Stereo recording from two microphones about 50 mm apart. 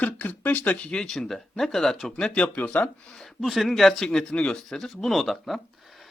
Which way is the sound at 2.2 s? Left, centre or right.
Left.